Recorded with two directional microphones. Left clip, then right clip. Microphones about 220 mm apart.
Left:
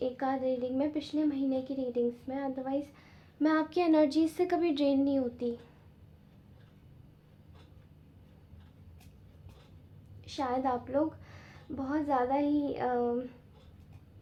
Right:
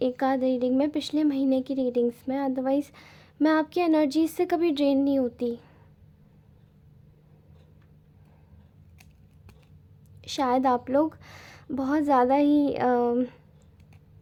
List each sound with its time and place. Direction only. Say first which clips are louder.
0.0 s speech: right 7 dB; 50° right (ahead or behind)
10.2 s speech: right 8 dB; 45° right (ahead or behind)